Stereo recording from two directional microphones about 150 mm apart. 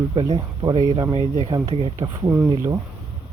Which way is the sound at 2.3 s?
15° right (ahead or behind).